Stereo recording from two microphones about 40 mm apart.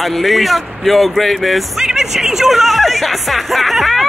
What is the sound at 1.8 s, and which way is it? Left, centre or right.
A woman's voice, centre.